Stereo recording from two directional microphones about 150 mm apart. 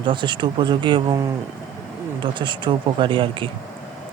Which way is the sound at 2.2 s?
30° right (ahead or behind).